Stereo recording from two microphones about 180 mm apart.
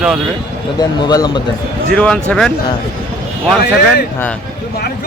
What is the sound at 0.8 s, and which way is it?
Speech, 20° left (ahead or behind).